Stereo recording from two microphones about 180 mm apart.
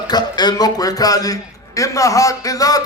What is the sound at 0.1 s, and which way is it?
A man's voice, 25° left (ahead or behind).